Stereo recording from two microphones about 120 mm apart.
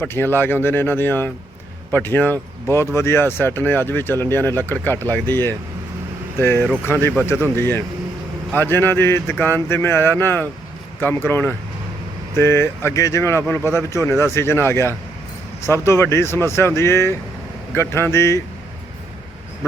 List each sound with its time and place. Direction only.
0.1 s speech: 20° left (ahead or behind)